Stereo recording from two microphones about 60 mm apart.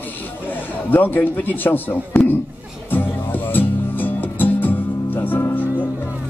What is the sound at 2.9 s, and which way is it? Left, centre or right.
Music, left.